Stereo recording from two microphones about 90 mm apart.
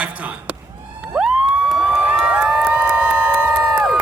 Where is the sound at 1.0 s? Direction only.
10° right (ahead or behind).